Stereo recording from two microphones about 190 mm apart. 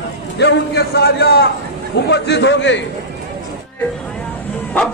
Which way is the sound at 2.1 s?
65° left (ahead or behind).